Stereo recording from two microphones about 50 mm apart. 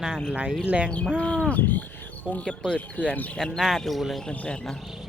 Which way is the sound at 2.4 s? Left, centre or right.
Centre.